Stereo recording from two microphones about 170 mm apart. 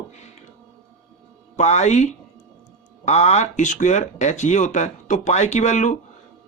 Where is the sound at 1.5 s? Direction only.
45° left (ahead or behind).